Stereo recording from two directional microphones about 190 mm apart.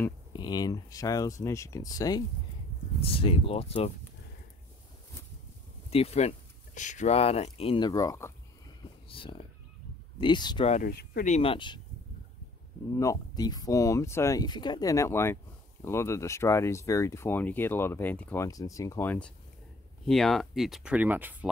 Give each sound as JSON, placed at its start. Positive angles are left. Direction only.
{"t": 0.3, "sound": "speech", "side_deg": 20}
{"t": 3.0, "sound": "speech", "side_deg": 30}
{"t": 5.9, "sound": "speech", "side_deg": 35}
{"t": 9.1, "sound": "speech", "side_deg": 30}
{"t": 10.7, "sound": "speech", "side_deg": 50}
{"t": 11.3, "sound": "speech", "side_deg": 25}
{"t": 12.9, "sound": "speech", "side_deg": 15}